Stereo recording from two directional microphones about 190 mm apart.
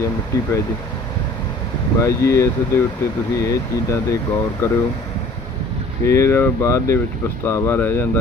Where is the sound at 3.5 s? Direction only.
15° left (ahead or behind).